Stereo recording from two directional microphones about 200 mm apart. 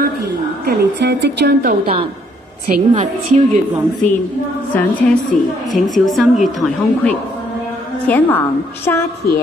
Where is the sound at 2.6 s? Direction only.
40° right (ahead or behind).